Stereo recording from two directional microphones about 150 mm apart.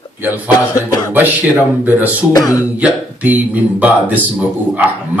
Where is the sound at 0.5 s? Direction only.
25° left (ahead or behind).